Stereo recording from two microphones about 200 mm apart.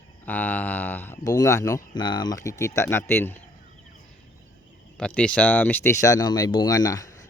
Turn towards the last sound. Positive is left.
turn(degrees=15)  # may be behind; listen again after turning